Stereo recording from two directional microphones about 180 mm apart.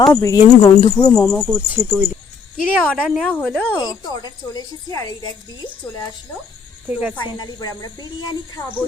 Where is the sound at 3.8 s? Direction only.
20° left (ahead or behind).